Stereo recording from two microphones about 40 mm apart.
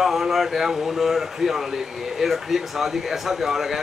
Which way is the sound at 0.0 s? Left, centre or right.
Centre.